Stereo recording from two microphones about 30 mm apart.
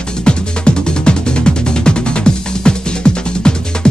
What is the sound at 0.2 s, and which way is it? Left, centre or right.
Music, left.